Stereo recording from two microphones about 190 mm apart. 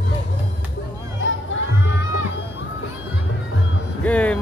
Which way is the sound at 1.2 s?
80° left.